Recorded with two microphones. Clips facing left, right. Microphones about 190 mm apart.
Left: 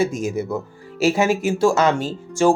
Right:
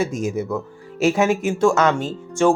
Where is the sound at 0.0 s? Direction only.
10° left (ahead or behind).